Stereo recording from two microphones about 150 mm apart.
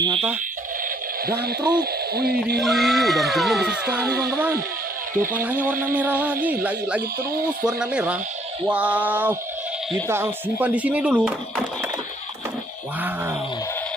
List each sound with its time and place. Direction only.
0.0 s speech: 35° right (ahead or behind)
1.2 s owl: 90° right
2.6 s speech: centre (ahead or behind)
4.2 s speech: 20° right (ahead or behind)
13.0 s speech: 15° right (ahead or behind)